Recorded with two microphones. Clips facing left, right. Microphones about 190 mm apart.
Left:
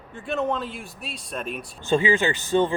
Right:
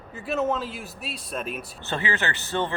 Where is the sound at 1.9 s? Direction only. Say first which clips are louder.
Left 7 dB; 15° left (ahead or behind).